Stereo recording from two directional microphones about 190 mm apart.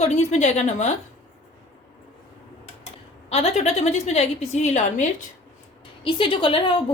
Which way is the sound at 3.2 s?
35° left (ahead or behind).